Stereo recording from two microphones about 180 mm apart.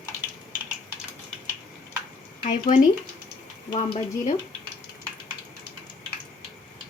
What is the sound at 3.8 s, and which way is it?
Speech, 40° left (ahead or behind).